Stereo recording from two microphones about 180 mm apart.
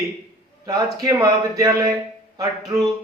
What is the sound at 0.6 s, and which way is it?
A man's voice, 20° right (ahead or behind).